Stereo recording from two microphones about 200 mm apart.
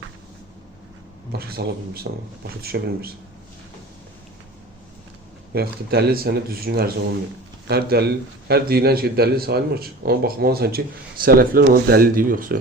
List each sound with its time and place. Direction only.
1.3 s a man's voice: 50° right (ahead or behind)
5.5 s a man's voice: 50° right (ahead or behind)